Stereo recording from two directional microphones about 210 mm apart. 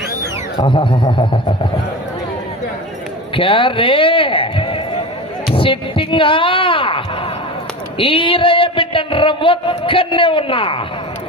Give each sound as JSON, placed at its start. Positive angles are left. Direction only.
{"t": 0.5, "sound": "a man's voice", "side_deg": 20}
{"t": 3.3, "sound": "a man's voice", "side_deg": 25}